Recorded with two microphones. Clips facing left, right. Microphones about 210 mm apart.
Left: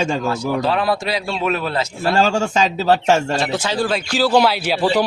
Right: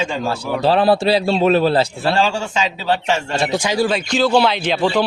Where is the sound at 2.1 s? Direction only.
45° left (ahead or behind).